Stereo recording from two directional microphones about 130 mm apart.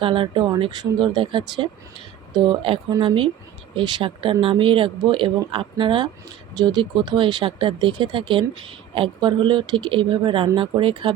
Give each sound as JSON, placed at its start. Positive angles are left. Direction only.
{"t": 0.0, "sound": "speech", "side_deg": -40}